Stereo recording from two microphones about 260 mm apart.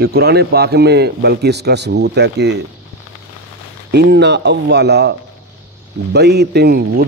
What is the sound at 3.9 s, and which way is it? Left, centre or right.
Speech, right.